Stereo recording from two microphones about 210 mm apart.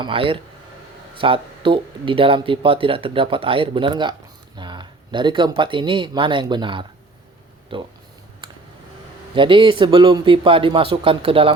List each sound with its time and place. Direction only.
0.0 s speech: 25° right (ahead or behind)
8.4 s a sound: 20° right (ahead or behind)
9.3 s speech: 25° right (ahead or behind)